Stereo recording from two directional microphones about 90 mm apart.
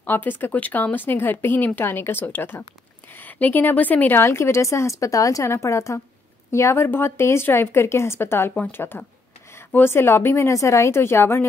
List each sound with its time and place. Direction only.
0.0 s speech: 20° left (ahead or behind)
4.2 s a woman's voice: 30° left (ahead or behind)